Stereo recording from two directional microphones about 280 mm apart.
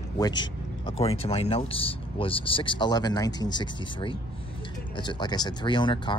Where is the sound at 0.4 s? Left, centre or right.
Centre.